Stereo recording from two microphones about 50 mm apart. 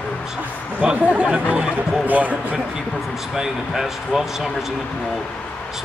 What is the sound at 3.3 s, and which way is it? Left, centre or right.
A man's voice, centre.